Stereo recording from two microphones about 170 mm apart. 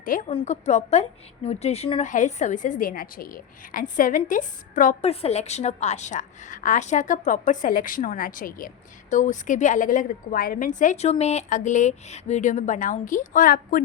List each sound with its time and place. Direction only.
0.3 s a woman's voice: 35° left (ahead or behind)
5.0 s a woman's voice: 40° left (ahead or behind); by 13.8 s 55° left (ahead or behind)